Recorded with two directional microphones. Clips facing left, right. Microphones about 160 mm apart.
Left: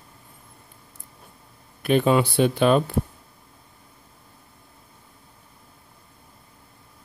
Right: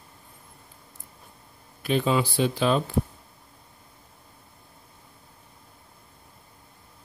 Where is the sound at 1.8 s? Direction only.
60° left (ahead or behind).